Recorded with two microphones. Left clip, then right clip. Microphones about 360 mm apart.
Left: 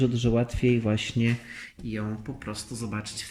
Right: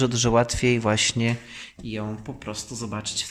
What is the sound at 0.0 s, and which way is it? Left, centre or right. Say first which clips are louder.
Speech: right 6 dB; centre.